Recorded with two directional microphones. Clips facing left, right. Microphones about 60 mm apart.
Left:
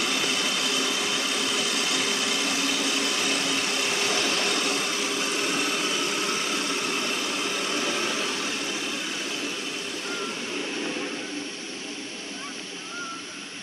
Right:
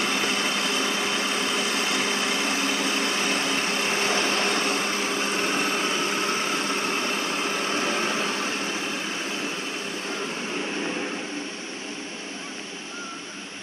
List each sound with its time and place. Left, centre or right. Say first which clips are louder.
0.0 s vehicle: right 2 dB; right